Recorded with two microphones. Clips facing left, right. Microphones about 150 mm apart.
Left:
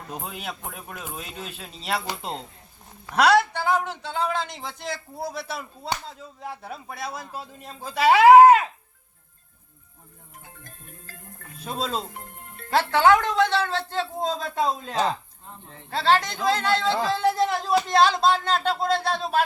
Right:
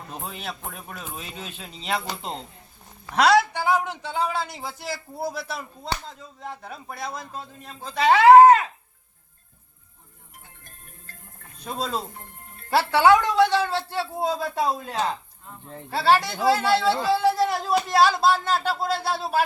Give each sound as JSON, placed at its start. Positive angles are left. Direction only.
{"t": 0.1, "sound": "a man's voice", "side_deg": 5}
{"t": 3.5, "sound": "speech", "side_deg": -10}
{"t": 11.1, "sound": "music", "side_deg": 90}
{"t": 11.6, "sound": "a man's voice", "side_deg": 0}
{"t": 12.7, "sound": "a man's voice", "side_deg": -10}